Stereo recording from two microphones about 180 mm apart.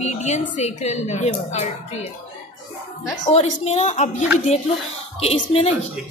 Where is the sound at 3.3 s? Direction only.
35° left (ahead or behind).